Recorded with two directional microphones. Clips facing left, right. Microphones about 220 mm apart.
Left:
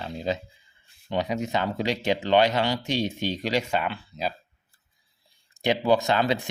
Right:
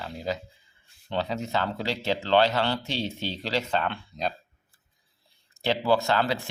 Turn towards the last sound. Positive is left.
turn(degrees=20)  # may be behind; listen again after turning